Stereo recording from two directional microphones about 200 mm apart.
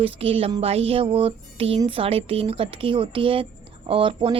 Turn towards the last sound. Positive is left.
turn(degrees=-25)  # may be behind; listen again after turning